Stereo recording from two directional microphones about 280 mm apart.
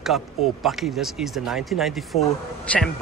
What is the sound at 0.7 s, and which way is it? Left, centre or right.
Speech, centre.